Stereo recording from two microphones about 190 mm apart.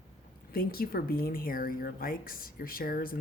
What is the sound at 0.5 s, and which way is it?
Speech, 50° left (ahead or behind).